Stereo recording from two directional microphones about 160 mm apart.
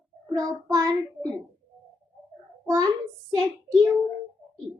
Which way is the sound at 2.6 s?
25° right (ahead or behind).